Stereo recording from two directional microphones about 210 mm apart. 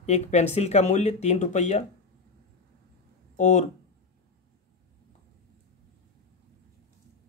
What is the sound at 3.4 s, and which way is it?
Speech, 35° left (ahead or behind).